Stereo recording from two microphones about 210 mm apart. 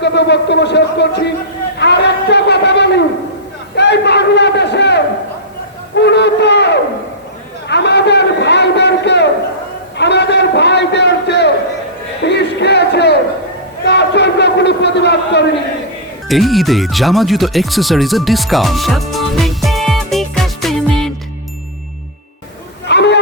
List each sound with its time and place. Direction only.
0.0 s a man's voice: 55° left (ahead or behind)
1.8 s a sound: 55° left (ahead or behind)
12.2 s music: 55° left (ahead or behind)
13.8 s a sound: 55° left (ahead or behind)
16.3 s speech: centre (ahead or behind)
22.9 s chatter: 55° left (ahead or behind)